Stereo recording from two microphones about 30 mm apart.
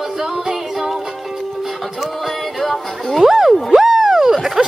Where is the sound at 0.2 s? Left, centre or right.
Centre.